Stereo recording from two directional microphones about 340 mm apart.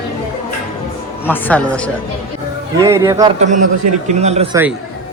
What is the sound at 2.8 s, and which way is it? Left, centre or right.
A man's voice, centre.